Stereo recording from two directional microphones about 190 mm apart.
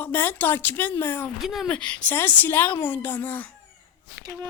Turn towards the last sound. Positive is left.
turn(degrees=-20)  # may be behind; listen again after turning